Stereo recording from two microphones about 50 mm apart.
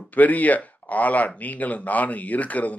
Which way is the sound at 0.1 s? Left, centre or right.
Left.